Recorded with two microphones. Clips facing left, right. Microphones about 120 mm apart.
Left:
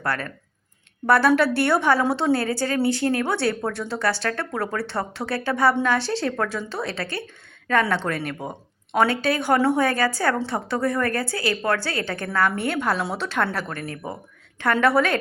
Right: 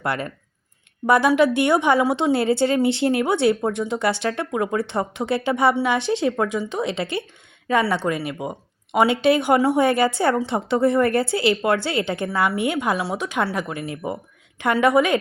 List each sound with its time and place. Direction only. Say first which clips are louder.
0.0 s a woman's voice: right 2 dB; 20° right (ahead or behind)
7.7 s a woman's voice: right 2 dB; 10° right (ahead or behind)